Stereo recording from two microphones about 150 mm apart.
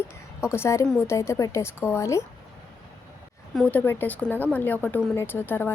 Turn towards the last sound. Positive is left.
turn(degrees=15)  # may be behind; listen again after turning